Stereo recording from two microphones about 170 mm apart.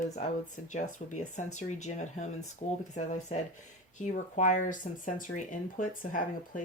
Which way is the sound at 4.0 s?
45° left (ahead or behind).